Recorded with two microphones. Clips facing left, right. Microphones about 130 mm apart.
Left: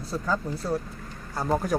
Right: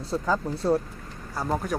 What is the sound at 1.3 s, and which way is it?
Speech, centre (ahead or behind).